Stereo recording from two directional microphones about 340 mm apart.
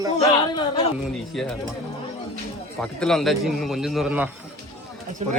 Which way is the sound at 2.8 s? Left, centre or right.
Centre.